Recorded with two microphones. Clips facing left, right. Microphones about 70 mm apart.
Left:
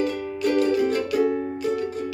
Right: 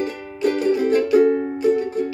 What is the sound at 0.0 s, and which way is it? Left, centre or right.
Music, right.